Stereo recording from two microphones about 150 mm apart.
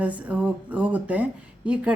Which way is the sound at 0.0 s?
10° right (ahead or behind).